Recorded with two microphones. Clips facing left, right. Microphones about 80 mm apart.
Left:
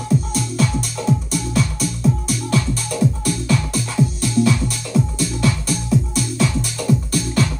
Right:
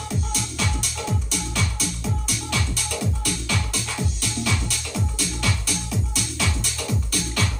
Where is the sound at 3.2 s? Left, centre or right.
Left.